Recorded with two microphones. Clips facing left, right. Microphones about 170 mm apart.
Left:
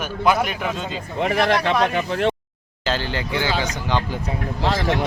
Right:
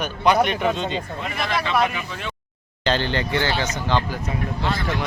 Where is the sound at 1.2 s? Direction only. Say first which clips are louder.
Left 11 dB; 70° left (ahead or behind).